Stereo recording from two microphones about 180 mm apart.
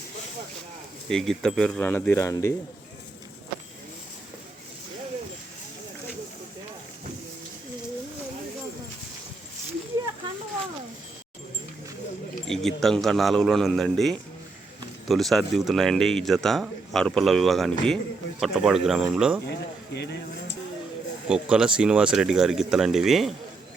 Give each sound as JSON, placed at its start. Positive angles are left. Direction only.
{"t": 1.0, "sound": "speech", "side_deg": 0}
{"t": 12.5, "sound": "speech", "side_deg": 0}
{"t": 19.5, "sound": "speech", "side_deg": 65}
{"t": 21.2, "sound": "speech", "side_deg": -5}